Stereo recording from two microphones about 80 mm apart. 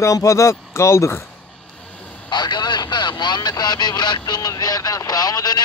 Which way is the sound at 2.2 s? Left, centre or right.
Left.